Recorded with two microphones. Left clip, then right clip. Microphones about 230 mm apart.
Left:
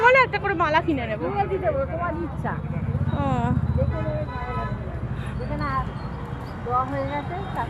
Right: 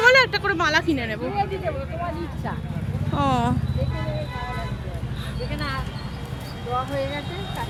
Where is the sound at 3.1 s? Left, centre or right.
Right.